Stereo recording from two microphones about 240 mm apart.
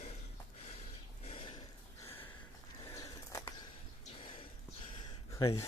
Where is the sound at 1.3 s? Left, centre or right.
Left.